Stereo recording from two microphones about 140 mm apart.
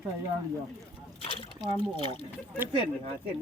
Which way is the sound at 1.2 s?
40° left (ahead or behind).